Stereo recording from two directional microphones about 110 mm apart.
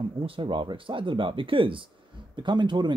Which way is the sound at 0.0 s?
50° right (ahead or behind).